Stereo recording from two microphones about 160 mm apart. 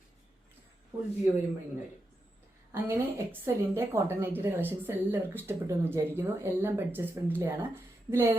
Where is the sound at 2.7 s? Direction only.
15° right (ahead or behind).